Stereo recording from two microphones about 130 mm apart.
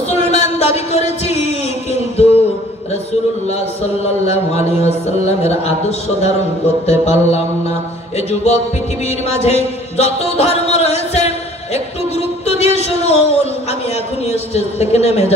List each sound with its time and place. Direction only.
0.1 s a sound: 55° left (ahead or behind)
3.4 s mantra: 55° left (ahead or behind)
9.0 s chant: 55° left (ahead or behind)
12.4 s a man's voice: 55° left (ahead or behind)